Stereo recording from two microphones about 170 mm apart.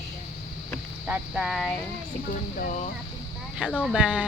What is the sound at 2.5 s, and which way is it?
Speech, 50° left (ahead or behind).